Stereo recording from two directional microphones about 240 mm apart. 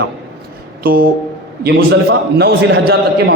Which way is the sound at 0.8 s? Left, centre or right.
Right.